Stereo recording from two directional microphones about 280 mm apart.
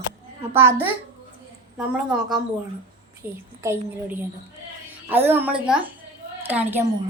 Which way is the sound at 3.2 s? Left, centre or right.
Centre.